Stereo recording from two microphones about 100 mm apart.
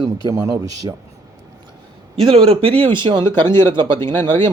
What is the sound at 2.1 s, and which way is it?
Speech, 75° right (ahead or behind).